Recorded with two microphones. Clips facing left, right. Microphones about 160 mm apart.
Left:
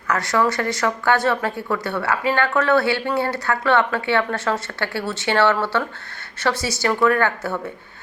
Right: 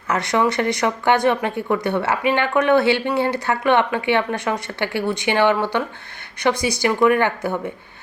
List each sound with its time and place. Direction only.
0.1 s a woman's voice: 20° right (ahead or behind)